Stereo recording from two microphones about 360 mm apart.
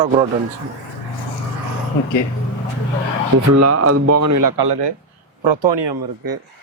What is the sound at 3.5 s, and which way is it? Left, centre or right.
Speech, right.